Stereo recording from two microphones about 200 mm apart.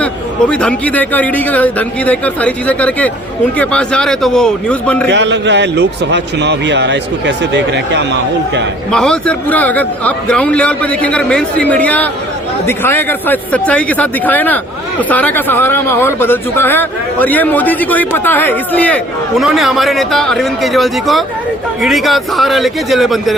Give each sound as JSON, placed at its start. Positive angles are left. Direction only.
{"t": 0.0, "sound": "a man's voice", "side_deg": 5}
{"t": 5.0, "sound": "a man's voice", "side_deg": -60}
{"t": 8.9, "sound": "a man's voice", "side_deg": 5}